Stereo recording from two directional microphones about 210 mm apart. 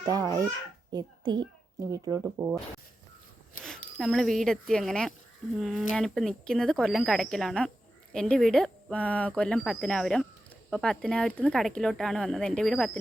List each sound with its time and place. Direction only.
0.0 s a child's voice: 15° right (ahead or behind)
3.9 s speech: centre (ahead or behind)